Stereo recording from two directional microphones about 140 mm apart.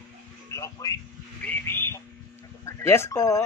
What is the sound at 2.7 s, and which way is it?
Speech, 20° left (ahead or behind).